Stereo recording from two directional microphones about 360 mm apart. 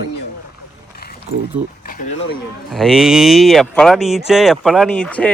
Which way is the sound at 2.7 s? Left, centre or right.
Centre.